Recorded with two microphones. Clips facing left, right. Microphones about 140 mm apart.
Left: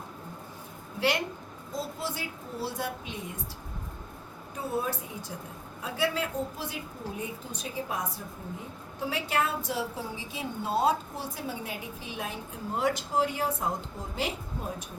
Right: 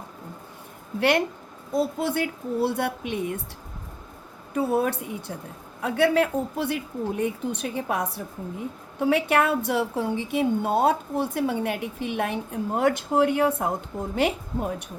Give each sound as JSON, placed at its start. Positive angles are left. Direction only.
{"t": 0.9, "sound": "a woman's voice", "side_deg": -55}
{"t": 4.5, "sound": "a woman's voice", "side_deg": -65}